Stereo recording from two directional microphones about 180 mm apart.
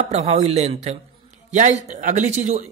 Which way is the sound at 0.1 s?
40° right (ahead or behind).